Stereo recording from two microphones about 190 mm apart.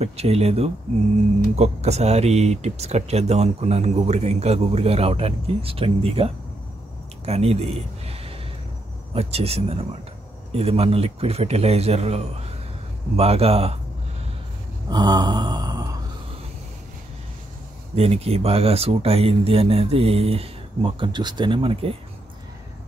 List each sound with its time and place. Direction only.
0.0 s speech: 35° right (ahead or behind)
14.9 s mantra: 20° right (ahead or behind)
17.9 s speech: 30° right (ahead or behind)